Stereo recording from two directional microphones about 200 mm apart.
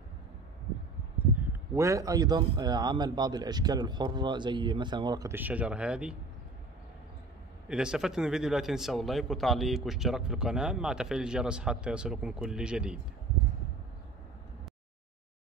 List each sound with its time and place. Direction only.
1.8 s speech: 15° right (ahead or behind)
7.6 s a man's voice: 5° right (ahead or behind)